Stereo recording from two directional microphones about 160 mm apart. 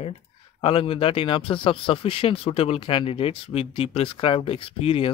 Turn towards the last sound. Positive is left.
turn(degrees=35)  # may be behind; listen again after turning